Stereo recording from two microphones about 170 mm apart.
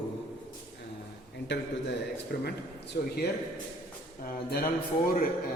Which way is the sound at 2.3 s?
50° left (ahead or behind).